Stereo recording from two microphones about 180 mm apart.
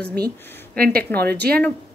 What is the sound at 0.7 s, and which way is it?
Speech, 55° right (ahead or behind).